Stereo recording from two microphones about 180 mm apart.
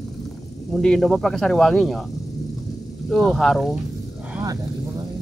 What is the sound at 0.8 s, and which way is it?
Speech, 5° left (ahead or behind).